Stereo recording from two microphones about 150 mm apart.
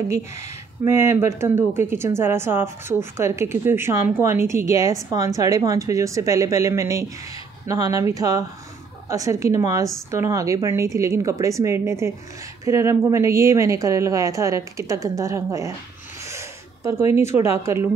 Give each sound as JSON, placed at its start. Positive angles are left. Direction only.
{"t": 0.8, "sound": "a woman's voice", "side_deg": -20}